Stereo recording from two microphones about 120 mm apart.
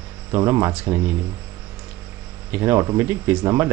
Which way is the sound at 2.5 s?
25° right (ahead or behind).